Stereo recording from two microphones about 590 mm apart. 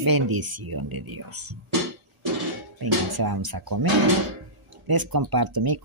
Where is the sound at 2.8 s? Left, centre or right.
Right.